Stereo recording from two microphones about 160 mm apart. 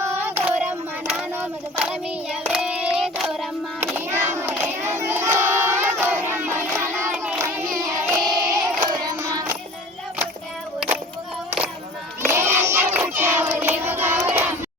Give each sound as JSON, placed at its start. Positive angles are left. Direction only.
{"t": 0.0, "sound": "child singing", "side_deg": -10}
{"t": 4.4, "sound": "crowd", "side_deg": -15}
{"t": 7.9, "sound": "a sound", "side_deg": -20}
{"t": 8.8, "sound": "child singing", "side_deg": -25}
{"t": 12.2, "sound": "crowd", "side_deg": -15}
{"t": 13.6, "sound": "child singing", "side_deg": -15}